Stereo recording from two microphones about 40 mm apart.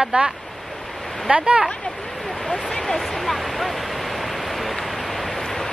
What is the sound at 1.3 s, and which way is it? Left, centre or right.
Speech, right.